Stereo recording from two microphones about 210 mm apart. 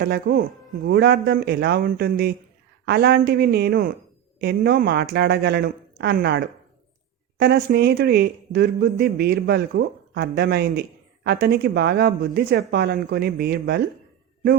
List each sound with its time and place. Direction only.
0.0 s speech: 45° right (ahead or behind)